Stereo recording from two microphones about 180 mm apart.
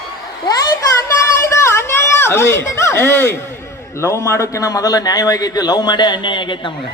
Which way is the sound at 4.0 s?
15° left (ahead or behind).